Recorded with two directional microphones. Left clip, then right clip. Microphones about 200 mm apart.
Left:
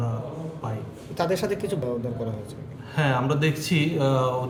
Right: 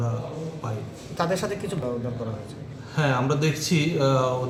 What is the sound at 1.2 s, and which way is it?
Speech, 40° left (ahead or behind).